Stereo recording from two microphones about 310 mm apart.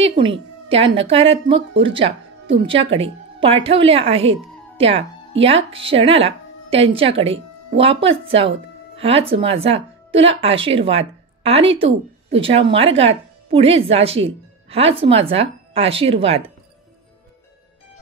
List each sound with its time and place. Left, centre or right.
0.0 s a woman's voice: centre